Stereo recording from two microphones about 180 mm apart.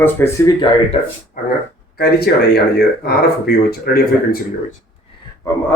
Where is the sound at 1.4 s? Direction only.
50° left (ahead or behind).